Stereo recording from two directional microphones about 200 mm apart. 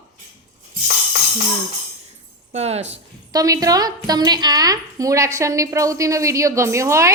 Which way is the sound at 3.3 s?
15° right (ahead or behind).